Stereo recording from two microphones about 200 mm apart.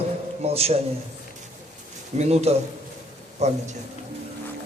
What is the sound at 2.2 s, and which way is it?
A man's voice, 30° right (ahead or behind).